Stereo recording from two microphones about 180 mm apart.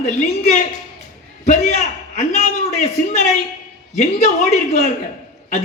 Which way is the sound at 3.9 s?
40° left (ahead or behind).